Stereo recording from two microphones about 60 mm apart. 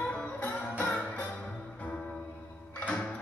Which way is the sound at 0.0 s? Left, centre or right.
Centre.